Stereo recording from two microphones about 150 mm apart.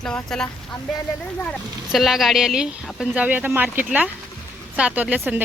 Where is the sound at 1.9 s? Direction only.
Centre (ahead or behind).